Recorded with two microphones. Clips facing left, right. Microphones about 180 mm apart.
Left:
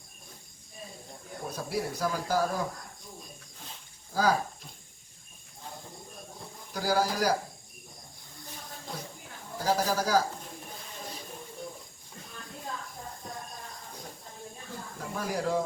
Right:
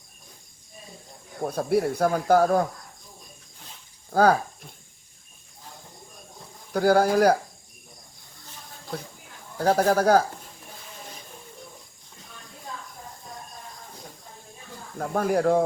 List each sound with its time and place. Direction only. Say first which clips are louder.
1.5 s speech: right 10 dB; 55° right (ahead or behind)
4.1 s speech: right 7 dB; 55° right (ahead or behind)
6.7 s speech: right 9 dB; 55° right (ahead or behind)
9.6 s speech: right 7 dB; 60° right (ahead or behind)
14.9 s speech: right 10 dB; 55° right (ahead or behind)